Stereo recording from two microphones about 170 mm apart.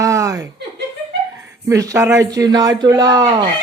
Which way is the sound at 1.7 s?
20° right (ahead or behind).